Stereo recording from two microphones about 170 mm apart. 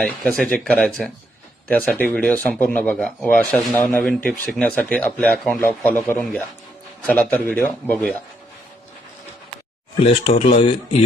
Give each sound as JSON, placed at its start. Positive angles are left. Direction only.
{"t": 0.2, "sound": "speech", "side_deg": 5}
{"t": 10.0, "sound": "speech", "side_deg": 35}